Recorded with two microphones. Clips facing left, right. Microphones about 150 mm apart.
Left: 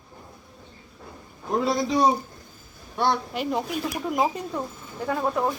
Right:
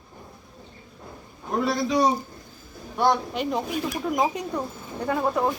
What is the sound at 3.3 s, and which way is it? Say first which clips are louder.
Speech: even; 5° left (ahead or behind).